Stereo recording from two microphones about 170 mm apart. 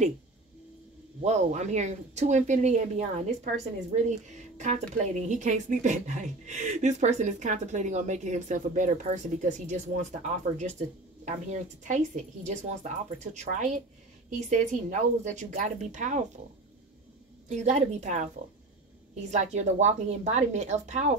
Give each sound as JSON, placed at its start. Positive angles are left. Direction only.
{"t": 1.2, "sound": "a woman's voice", "side_deg": -40}
{"t": 17.5, "sound": "a woman's voice", "side_deg": -45}
{"t": 19.3, "sound": "speech", "side_deg": -45}